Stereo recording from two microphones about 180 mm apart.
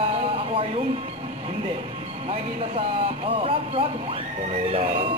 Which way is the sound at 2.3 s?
30° right (ahead or behind).